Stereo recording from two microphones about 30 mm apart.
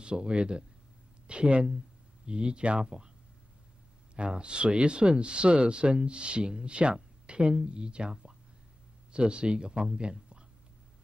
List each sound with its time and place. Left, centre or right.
0.0 s speech: right
4.3 s speech: right
9.1 s speech: right